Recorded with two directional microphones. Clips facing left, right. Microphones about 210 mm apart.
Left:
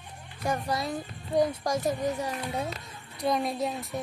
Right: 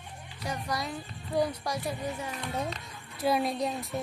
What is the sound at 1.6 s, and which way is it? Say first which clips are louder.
Speech: left 6 dB; 45° left (ahead or behind).